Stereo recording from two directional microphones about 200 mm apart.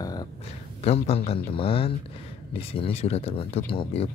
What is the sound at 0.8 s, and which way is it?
Speech, 30° left (ahead or behind).